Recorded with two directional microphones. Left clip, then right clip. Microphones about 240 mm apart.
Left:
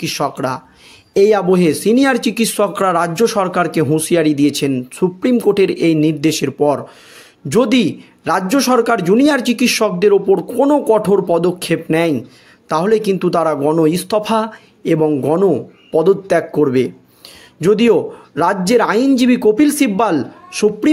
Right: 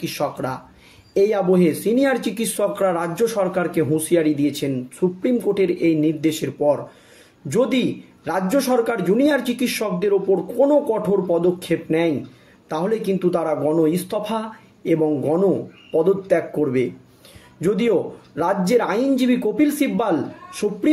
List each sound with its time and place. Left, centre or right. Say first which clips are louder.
0.0 s a man's voice: left 6 dB; left